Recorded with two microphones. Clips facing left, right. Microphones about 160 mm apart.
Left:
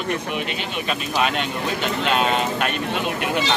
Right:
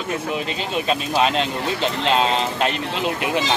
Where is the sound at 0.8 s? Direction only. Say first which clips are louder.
Right 3 dB; 30° right (ahead or behind).